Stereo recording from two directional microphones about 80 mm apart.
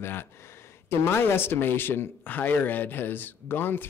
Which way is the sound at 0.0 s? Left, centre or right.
Left.